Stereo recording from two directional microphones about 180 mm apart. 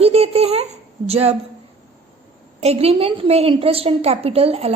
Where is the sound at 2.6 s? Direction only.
35° right (ahead or behind).